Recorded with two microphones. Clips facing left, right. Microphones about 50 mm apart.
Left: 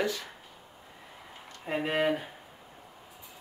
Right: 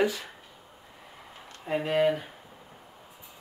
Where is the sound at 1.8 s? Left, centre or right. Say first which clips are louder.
Right 3 dB; centre.